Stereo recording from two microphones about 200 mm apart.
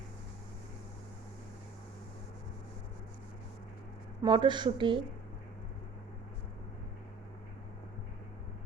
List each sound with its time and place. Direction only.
4.2 s speech: 25° right (ahead or behind)